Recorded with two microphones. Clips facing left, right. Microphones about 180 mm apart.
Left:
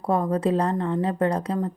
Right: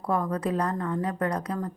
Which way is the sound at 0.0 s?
25° left (ahead or behind).